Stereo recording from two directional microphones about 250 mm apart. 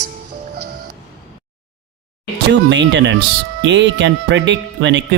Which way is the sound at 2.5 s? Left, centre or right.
Right.